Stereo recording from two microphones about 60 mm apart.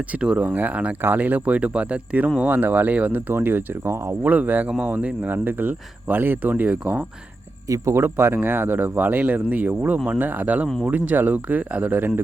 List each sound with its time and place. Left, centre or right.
0.2 s speech: centre
0.4 s speech: right
3.2 s speech: right
4.2 s speech: right
7.7 s speech: right
8.0 s speech: right